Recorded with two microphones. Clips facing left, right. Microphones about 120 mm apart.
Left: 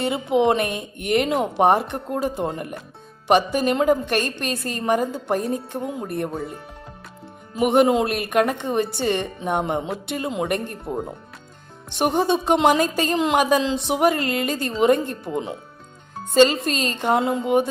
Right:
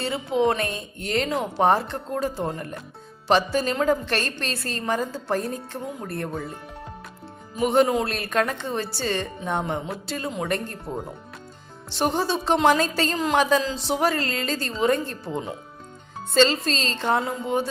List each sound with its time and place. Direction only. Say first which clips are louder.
0.0 s a woman's voice: left 3 dB; 20° left (ahead or behind)
7.6 s a woman's voice: left 3 dB; 20° left (ahead or behind)
12.5 s a woman's voice: right 1 dB; 20° left (ahead or behind)